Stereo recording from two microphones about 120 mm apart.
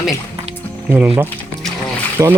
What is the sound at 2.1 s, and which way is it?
Speech, 20° right (ahead or behind).